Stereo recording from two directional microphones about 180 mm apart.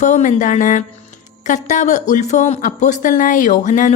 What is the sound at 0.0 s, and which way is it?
A woman's voice, 45° left (ahead or behind).